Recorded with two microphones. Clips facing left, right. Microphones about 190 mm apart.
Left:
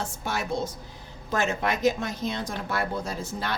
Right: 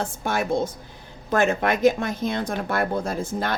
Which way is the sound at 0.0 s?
55° right (ahead or behind).